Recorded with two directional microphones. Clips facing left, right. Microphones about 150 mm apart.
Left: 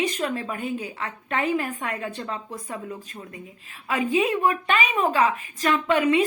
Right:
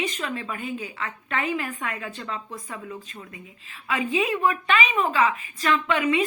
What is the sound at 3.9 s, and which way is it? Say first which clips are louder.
A woman's voice: left 2 dB; 40° left (ahead or behind).